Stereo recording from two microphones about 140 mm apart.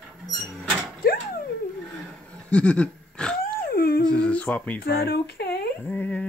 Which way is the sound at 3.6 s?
90° left.